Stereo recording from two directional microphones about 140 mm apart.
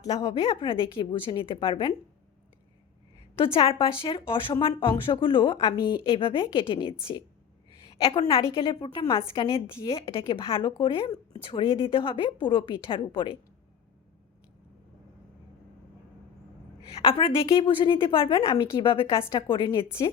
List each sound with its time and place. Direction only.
0.3 s speech: 40° left (ahead or behind)
3.3 s speech: 40° left (ahead or behind)
8.3 s speech: 35° left (ahead or behind)
16.9 s speech: 45° left (ahead or behind)